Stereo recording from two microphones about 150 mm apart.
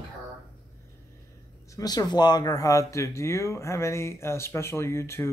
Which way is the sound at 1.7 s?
25° left (ahead or behind).